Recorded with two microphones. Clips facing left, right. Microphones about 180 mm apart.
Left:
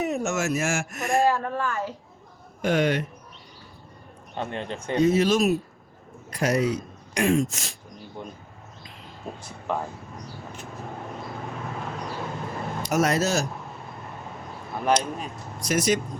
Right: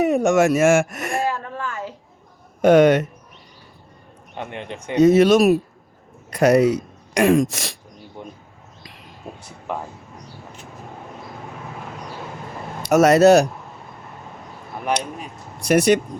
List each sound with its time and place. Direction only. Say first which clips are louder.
0.0 s speech: right 10 dB; 65° right (ahead or behind)
1.3 s a sound: left 2 dB; 20° right (ahead or behind)
2.6 s speech: right 10 dB; 65° right (ahead or behind)
4.4 s speech: even; 15° right (ahead or behind)
5.0 s speech: right 8 dB; 65° right (ahead or behind)
8.2 s speech: right 1 dB; 15° right (ahead or behind)
9.7 s speech: even; 15° right (ahead or behind)
12.9 s speech: right 11 dB; 70° right (ahead or behind)
14.9 s speech: left 1 dB; 15° right (ahead or behind)
15.6 s speech: right 8 dB; 65° right (ahead or behind)